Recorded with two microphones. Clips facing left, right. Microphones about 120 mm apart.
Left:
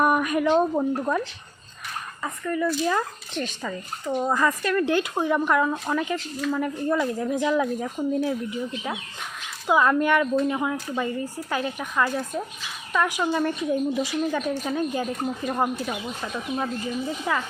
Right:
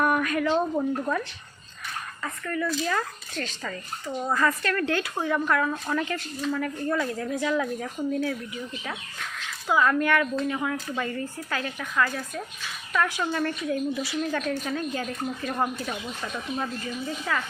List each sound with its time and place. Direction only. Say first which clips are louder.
0.0 s a sound: left 3 dB; 15° left (ahead or behind)
0.4 s a woman's voice: left 3 dB; 15° left (ahead or behind)
9.6 s a woman's voice: left 3 dB; 15° left (ahead or behind)